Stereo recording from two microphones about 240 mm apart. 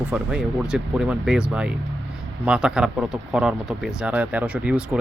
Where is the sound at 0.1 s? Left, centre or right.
Centre.